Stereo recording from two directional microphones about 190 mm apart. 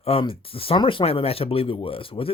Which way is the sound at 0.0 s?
30° left (ahead or behind).